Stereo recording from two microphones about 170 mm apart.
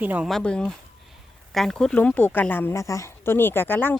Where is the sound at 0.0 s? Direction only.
10° right (ahead or behind).